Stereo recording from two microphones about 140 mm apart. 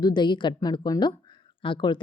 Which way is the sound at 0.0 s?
30° left (ahead or behind).